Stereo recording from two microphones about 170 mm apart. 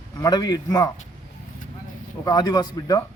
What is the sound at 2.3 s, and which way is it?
Speech, 25° left (ahead or behind).